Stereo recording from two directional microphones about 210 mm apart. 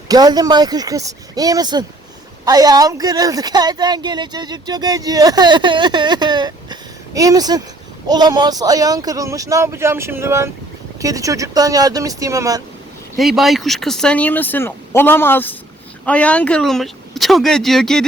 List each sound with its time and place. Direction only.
0.1 s speech: 20° right (ahead or behind)
13.1 s speech: centre (ahead or behind)